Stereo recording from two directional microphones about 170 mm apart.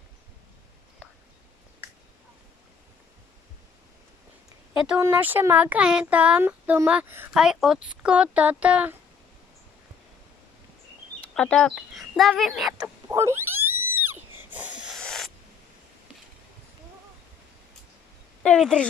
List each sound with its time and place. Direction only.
4.8 s speech: 10° right (ahead or behind)
11.3 s speech: 5° left (ahead or behind)
12.8 s frog: 15° right (ahead or behind)
14.4 s wheeze: 10° right (ahead or behind)
15.0 s owl: 5° left (ahead or behind)
18.4 s speech: 5° left (ahead or behind)